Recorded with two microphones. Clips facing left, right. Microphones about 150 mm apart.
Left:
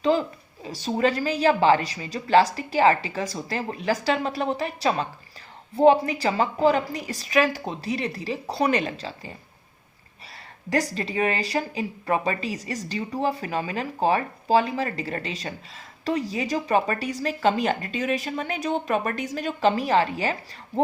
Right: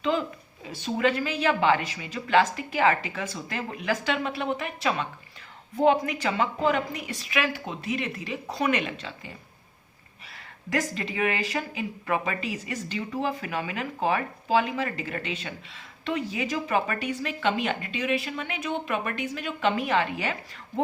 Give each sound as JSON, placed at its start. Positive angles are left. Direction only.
{"t": 0.1, "sound": "speech", "side_deg": 35}
{"t": 10.3, "sound": "speech", "side_deg": 35}